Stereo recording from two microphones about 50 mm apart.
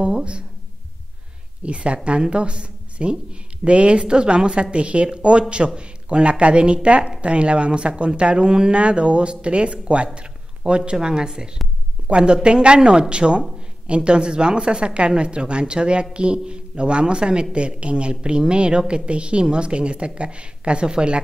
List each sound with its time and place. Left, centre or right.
0.0 s speech: right
1.6 s speech: right
10.1 s a sound: right
10.9 s speech: centre